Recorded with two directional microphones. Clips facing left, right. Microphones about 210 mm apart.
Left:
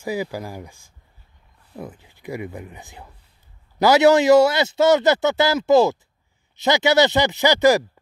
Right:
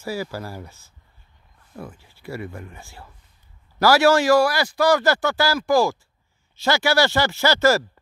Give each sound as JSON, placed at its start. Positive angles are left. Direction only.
{"t": 0.0, "sound": "a man's voice", "side_deg": 15}